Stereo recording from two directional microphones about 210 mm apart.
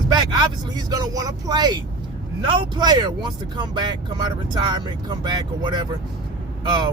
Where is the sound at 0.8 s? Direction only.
15° right (ahead or behind).